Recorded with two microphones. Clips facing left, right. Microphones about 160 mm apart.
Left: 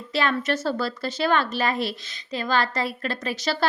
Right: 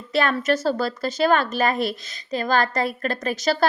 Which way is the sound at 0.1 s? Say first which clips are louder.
Right 3 dB; 50° right (ahead or behind).